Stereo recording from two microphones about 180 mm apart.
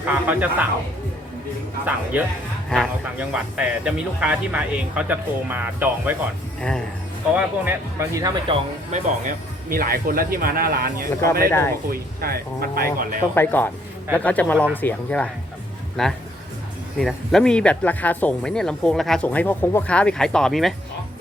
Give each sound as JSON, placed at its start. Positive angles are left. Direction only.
{"t": 0.3, "sound": "speech", "side_deg": -10}
{"t": 2.1, "sound": "speech", "side_deg": -5}
{"t": 2.7, "sound": "speech", "side_deg": 5}
{"t": 3.2, "sound": "speech", "side_deg": -5}
{"t": 6.6, "sound": "speech", "side_deg": 5}
{"t": 7.3, "sound": "speech", "side_deg": -10}
{"t": 8.5, "sound": "speech", "side_deg": -45}
{"t": 11.4, "sound": "speech", "side_deg": 15}
{"t": 11.9, "sound": "speech", "side_deg": -55}
{"t": 13.3, "sound": "speech", "side_deg": 10}